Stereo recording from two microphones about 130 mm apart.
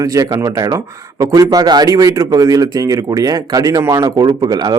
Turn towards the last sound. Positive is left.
turn(degrees=-30)  # may be behind; listen again after turning